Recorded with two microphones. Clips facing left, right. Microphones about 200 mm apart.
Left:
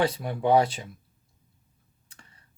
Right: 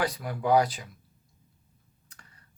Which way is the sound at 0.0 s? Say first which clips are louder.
Left 4 dB; 25° left (ahead or behind).